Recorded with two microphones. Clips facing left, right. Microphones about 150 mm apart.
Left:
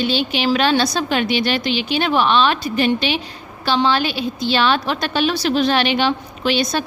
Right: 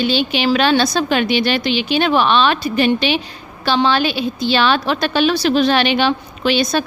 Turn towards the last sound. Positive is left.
turn(degrees=-80)